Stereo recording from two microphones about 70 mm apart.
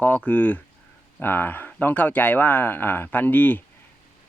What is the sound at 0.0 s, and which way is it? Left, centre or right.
Speech, left.